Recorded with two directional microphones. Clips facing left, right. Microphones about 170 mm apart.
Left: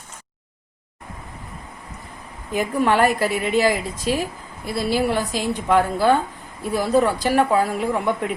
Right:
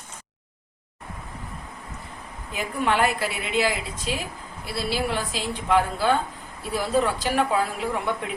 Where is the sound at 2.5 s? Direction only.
40° left (ahead or behind).